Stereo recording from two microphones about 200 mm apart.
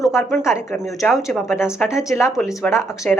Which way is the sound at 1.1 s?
Centre (ahead or behind).